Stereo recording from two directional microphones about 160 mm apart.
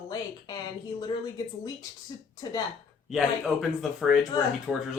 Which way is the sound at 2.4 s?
25° left (ahead or behind).